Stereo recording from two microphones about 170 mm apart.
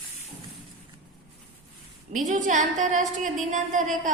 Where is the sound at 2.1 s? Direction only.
45° right (ahead or behind).